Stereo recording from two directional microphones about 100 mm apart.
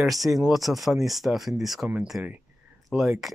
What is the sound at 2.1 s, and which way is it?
Speech, 20° right (ahead or behind).